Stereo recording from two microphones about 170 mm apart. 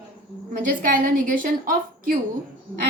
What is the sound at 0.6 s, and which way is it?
A woman's voice, 55° right (ahead or behind).